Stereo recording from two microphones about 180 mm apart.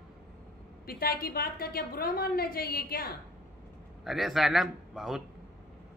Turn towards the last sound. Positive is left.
turn(degrees=0)  # may be behind; listen again after turning